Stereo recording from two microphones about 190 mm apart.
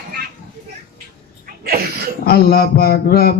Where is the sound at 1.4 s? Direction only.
55° right (ahead or behind).